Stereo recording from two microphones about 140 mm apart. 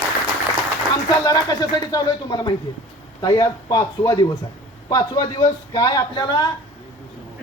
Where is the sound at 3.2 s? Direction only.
30° left (ahead or behind).